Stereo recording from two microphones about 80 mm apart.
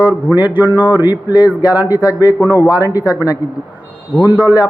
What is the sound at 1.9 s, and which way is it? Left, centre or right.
Speech, left.